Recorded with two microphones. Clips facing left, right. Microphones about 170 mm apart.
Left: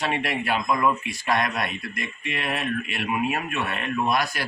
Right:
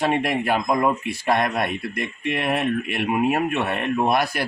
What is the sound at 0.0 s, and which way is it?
Speech, 50° right (ahead or behind).